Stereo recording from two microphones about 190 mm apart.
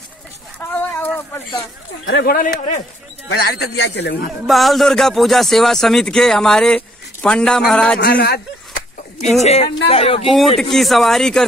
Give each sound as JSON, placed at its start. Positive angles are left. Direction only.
{"t": 0.6, "sound": "a sound", "side_deg": 10}
{"t": 2.0, "sound": "speech", "side_deg": 50}
{"t": 3.3, "sound": "a man's voice", "side_deg": 60}
{"t": 4.5, "sound": "a man's voice", "side_deg": 0}
{"t": 8.0, "sound": "a man's voice", "side_deg": 55}
{"t": 9.4, "sound": "speech", "side_deg": 35}
{"t": 10.3, "sound": "a man's voice", "side_deg": 0}